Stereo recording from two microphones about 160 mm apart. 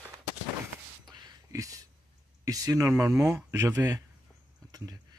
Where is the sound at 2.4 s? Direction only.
20° right (ahead or behind).